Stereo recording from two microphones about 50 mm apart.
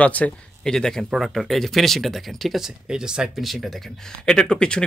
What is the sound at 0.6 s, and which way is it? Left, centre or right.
Speech, centre.